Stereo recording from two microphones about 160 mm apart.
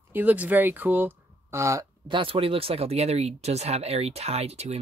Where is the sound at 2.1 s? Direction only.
35° right (ahead or behind).